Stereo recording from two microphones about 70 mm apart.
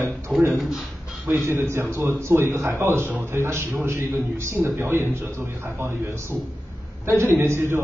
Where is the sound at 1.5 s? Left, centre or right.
Right.